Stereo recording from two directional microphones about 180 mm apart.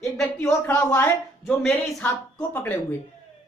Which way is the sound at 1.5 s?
5° left (ahead or behind).